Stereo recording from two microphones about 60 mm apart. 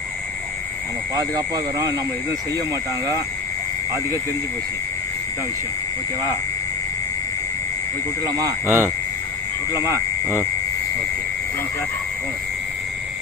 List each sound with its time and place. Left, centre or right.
1.1 s speech: right
8.2 s speech: right
8.6 s speech: right